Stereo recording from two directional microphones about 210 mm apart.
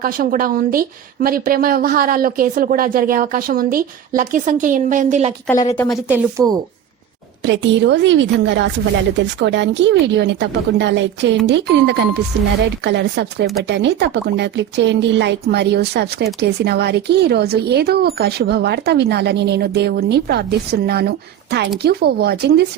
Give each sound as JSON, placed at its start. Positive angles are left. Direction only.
{"t": 0.0, "sound": "speech", "side_deg": -40}
{"t": 5.7, "sound": "speech", "side_deg": 5}
{"t": 6.4, "sound": "a woman's voice", "side_deg": -15}
{"t": 7.4, "sound": "a woman's voice", "side_deg": -60}